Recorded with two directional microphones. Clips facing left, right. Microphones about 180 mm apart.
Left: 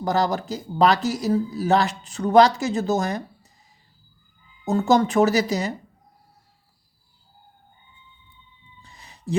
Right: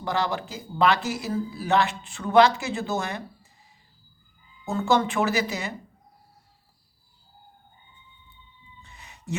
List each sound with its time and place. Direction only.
0.0 s speech: 40° left (ahead or behind)
4.6 s speech: 40° left (ahead or behind)
8.8 s a sound: 35° left (ahead or behind)